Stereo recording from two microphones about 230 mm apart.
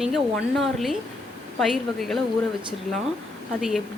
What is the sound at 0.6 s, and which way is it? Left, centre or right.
Speech, centre.